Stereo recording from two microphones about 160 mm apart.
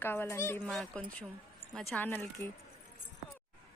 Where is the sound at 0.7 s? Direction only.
5° left (ahead or behind).